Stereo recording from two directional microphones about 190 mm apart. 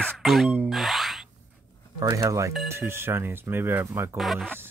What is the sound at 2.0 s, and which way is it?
Speech, 15° right (ahead or behind).